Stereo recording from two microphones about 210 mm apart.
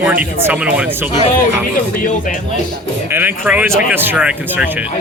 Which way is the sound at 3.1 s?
10° right (ahead or behind).